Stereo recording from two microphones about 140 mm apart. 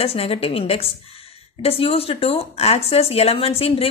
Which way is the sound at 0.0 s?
45° left (ahead or behind).